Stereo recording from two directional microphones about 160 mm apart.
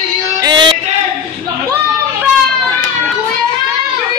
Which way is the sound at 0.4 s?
30° right (ahead or behind).